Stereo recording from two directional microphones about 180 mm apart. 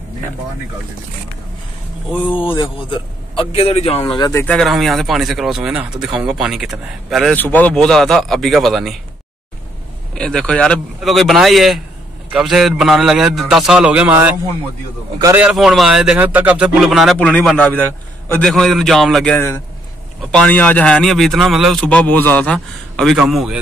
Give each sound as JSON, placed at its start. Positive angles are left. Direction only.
{"t": 2.2, "sound": "a man's voice", "side_deg": 30}
{"t": 4.5, "sound": "a man's voice", "side_deg": 0}
{"t": 7.3, "sound": "a man's voice", "side_deg": 10}
{"t": 10.1, "sound": "a man's voice", "side_deg": 5}
{"t": 15.3, "sound": "a man's voice", "side_deg": -5}